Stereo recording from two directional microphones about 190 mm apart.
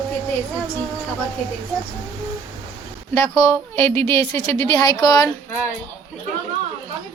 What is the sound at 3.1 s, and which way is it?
Speech, 15° left (ahead or behind).